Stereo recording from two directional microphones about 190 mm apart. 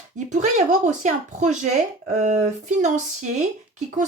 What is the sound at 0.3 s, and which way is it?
Speech, 40° right (ahead or behind).